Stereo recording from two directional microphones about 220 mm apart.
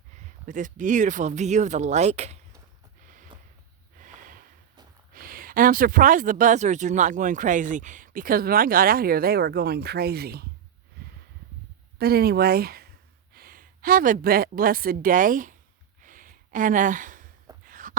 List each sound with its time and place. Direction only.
0.4 s speech: 35° right (ahead or behind)
3.9 s snort: 40° right (ahead or behind)
5.1 s speech: 40° right (ahead or behind)
11.9 s speech: 45° right (ahead or behind)
16.0 s a sound: 40° right (ahead or behind)